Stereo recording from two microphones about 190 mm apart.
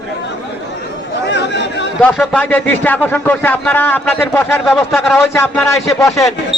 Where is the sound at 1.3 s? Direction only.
65° left (ahead or behind).